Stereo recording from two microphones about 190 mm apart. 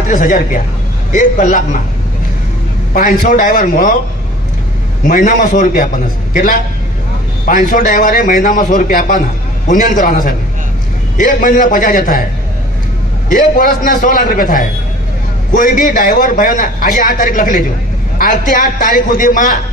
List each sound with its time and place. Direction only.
0.1 s a man's voice: 45° left (ahead or behind)
2.9 s a man's voice: 45° left (ahead or behind)
5.0 s a man's voice: 45° left (ahead or behind)
13.3 s a man's voice: 45° left (ahead or behind)